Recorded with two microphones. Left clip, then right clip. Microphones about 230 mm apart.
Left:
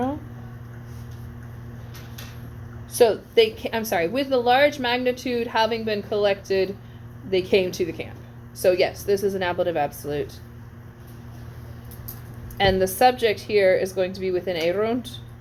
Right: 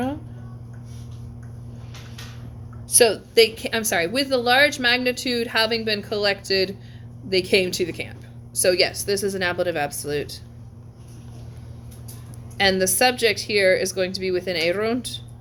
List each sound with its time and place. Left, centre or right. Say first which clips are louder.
2.9 s a woman's voice: even; right
12.5 s a woman's voice: even; right